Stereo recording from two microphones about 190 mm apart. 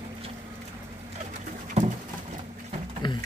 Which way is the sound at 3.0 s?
25° left (ahead or behind).